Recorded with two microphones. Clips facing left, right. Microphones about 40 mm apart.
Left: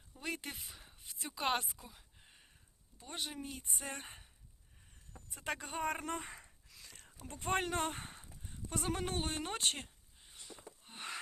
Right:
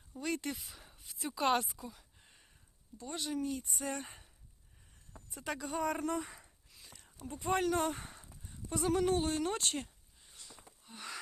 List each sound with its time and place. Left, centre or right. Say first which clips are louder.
0.2 s speech: right 5 dB; left
0.6 s speech: even; centre; by 4.3 s left
5.3 s speech: right 2 dB; left
6.8 s a sound: even; left
7.3 s speech: right 3 dB; left
8.4 s a sound: right 5 dB; left